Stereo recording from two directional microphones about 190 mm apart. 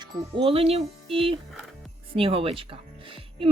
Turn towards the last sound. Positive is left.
turn(degrees=-30)  # may be behind; listen again after turning